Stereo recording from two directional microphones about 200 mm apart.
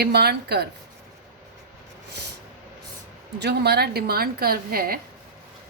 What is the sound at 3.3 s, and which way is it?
A woman's voice, 55° right (ahead or behind).